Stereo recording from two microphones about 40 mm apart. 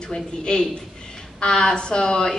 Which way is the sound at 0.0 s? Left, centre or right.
Left.